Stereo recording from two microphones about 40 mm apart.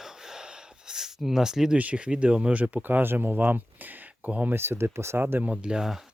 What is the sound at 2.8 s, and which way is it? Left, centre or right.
Speech, right.